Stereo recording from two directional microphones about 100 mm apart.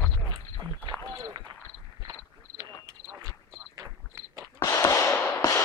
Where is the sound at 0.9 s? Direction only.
55° right (ahead or behind).